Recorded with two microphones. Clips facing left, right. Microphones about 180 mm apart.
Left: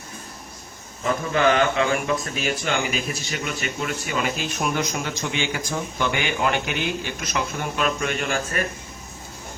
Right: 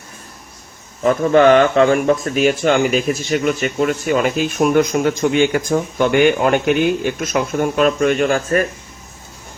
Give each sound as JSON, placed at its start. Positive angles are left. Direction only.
{"t": 1.0, "sound": "speech", "side_deg": -40}